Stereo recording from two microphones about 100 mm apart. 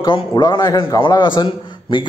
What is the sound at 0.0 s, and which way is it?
A man's voice, 50° left (ahead or behind).